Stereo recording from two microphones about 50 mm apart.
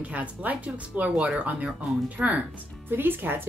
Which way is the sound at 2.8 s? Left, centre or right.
Right.